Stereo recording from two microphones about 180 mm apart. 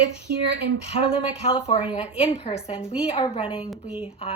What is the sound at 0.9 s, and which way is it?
Speech, 35° left (ahead or behind).